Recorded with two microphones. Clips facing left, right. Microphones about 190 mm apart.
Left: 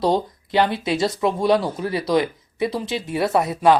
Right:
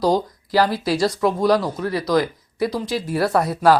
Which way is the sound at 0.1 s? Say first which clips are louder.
Right 1 dB; centre (ahead or behind).